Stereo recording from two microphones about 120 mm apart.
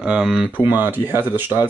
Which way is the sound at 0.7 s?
15° right (ahead or behind).